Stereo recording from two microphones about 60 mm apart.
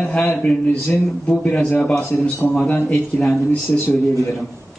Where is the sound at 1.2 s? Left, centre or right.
Left.